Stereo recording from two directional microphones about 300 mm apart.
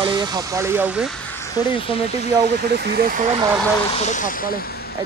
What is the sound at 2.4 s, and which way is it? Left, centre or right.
Speech, right.